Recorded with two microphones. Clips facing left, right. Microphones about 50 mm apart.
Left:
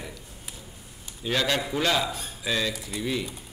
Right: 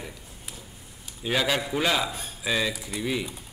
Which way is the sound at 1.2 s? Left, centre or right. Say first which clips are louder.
Even; centre.